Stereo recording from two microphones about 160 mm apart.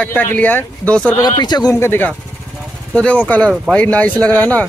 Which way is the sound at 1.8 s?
15° left (ahead or behind).